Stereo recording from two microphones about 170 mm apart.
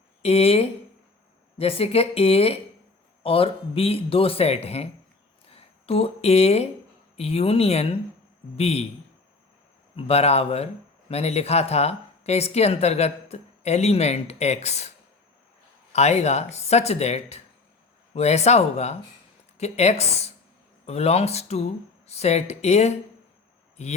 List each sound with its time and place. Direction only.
0.2 s speech: 35° left (ahead or behind)
9.9 s speech: 35° left (ahead or behind)